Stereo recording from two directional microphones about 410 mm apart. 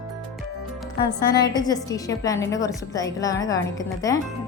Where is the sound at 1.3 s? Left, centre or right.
Centre.